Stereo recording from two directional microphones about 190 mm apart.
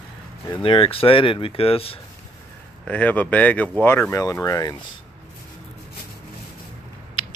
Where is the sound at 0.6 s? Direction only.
30° left (ahead or behind).